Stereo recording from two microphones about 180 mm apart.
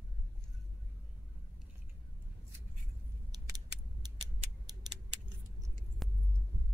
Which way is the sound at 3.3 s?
20° right (ahead or behind).